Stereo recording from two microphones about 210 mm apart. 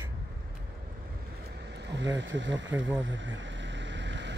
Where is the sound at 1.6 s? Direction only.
55° right (ahead or behind).